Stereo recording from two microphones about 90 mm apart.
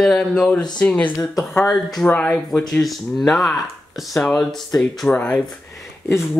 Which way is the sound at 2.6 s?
5° left (ahead or behind).